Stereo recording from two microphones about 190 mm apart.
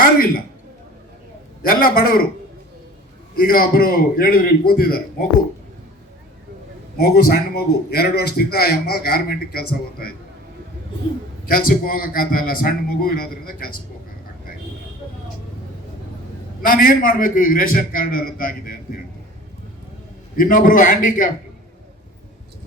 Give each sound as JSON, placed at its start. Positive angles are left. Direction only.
{"t": 0.0, "sound": "a sound", "side_deg": 50}
{"t": 1.6, "sound": "a man's voice", "side_deg": 50}
{"t": 3.3, "sound": "a man's voice", "side_deg": 50}
{"t": 7.0, "sound": "a man's voice", "side_deg": 55}
{"t": 11.4, "sound": "a man's voice", "side_deg": 50}
{"t": 16.6, "sound": "a man's voice", "side_deg": 45}
{"t": 20.3, "sound": "a man's voice", "side_deg": 45}